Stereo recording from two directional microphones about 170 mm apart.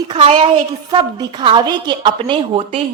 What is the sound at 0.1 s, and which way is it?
A woman's voice, 30° right (ahead or behind).